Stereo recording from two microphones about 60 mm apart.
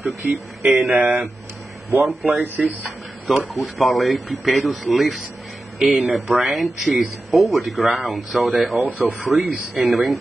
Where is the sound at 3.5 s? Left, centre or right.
Centre.